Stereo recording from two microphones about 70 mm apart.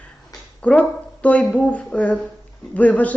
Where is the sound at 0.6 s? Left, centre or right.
Centre.